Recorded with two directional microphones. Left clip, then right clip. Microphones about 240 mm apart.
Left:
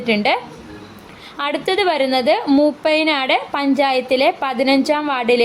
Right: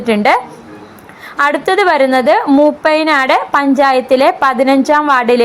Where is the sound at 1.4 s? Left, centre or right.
Centre.